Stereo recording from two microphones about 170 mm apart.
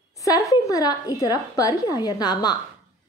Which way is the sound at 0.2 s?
20° left (ahead or behind).